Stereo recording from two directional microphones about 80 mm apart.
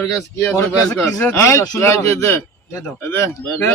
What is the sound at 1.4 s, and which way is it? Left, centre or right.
A man's voice, left.